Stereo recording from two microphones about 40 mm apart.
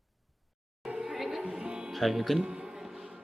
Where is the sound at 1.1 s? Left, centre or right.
Centre.